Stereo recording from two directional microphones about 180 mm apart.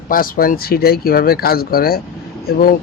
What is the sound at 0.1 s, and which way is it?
Speech, 50° left (ahead or behind).